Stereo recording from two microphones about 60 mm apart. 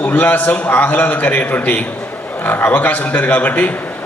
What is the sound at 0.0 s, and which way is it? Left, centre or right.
A man's voice, left.